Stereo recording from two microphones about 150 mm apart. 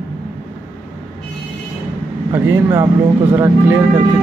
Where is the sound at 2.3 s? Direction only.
15° right (ahead or behind).